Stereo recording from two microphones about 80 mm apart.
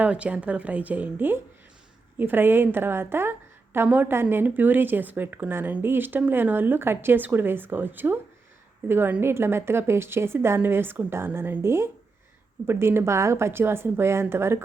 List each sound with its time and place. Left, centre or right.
0.0 s a woman's voice: centre; by 14.6 s right